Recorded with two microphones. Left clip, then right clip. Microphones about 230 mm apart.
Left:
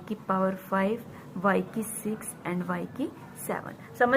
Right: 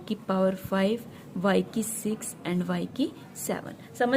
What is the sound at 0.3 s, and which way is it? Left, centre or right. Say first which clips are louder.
A woman's voice: right 1 dB; right.